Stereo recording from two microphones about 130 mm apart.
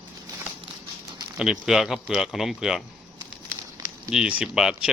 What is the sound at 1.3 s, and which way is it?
Speech, 5° right (ahead or behind).